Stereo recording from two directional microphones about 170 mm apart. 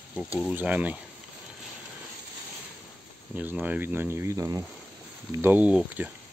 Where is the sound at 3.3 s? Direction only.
10° right (ahead or behind).